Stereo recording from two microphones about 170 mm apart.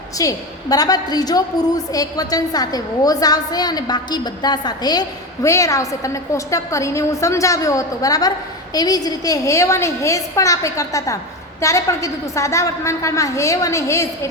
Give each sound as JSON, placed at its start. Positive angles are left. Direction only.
{"t": 0.2, "sound": "a woman's voice", "side_deg": 20}